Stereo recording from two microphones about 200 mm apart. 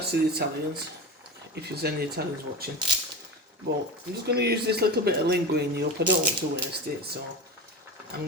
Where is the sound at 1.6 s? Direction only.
50° right (ahead or behind).